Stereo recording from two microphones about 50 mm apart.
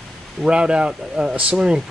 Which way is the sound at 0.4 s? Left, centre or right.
Centre.